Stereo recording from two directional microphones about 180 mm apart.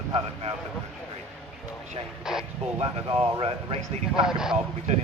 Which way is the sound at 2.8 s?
30° right (ahead or behind).